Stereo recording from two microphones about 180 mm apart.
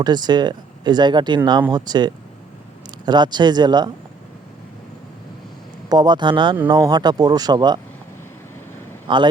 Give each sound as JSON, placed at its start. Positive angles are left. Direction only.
{"t": 0.0, "sound": "speech", "side_deg": -25}
{"t": 5.9, "sound": "speech", "side_deg": -25}
{"t": 9.1, "sound": "speech", "side_deg": -25}